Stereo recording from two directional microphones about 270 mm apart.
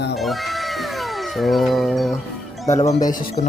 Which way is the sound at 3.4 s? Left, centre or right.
Left.